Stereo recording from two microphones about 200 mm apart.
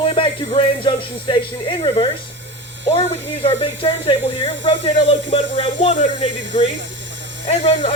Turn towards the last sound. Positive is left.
turn(degrees=30)  # may be behind; listen again after turning